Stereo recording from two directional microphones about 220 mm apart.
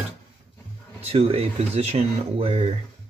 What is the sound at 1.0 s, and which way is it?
Speech, 25° right (ahead or behind).